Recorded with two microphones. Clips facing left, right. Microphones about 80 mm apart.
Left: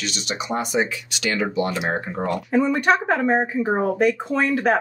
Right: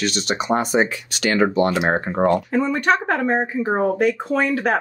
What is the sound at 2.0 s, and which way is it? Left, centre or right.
Speech, right.